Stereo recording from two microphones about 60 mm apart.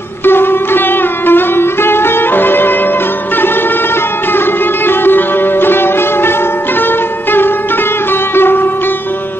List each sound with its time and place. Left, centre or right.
0.2 s music: left
4.8 s music: left